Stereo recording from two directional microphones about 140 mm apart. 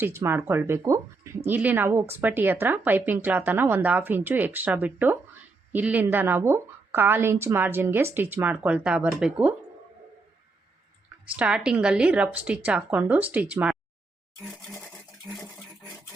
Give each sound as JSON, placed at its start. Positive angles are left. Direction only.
{"t": 0.0, "sound": "speech", "side_deg": -15}
{"t": 11.3, "sound": "speech", "side_deg": -5}
{"t": 15.4, "sound": "a sound", "side_deg": 5}